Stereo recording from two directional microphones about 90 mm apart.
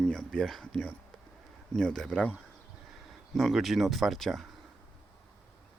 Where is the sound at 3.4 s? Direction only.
Centre (ahead or behind).